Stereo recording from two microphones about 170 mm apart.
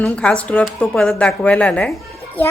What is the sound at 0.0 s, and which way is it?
A child's voice, 5° left (ahead or behind).